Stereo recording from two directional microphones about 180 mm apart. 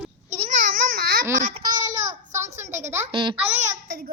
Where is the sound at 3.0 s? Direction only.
25° right (ahead or behind).